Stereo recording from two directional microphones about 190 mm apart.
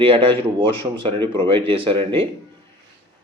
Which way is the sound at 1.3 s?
25° right (ahead or behind).